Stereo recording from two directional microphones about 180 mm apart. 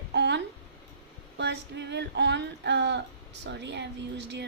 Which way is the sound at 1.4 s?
75° right (ahead or behind).